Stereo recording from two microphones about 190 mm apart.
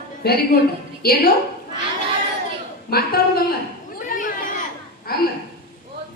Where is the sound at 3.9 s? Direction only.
45° left (ahead or behind).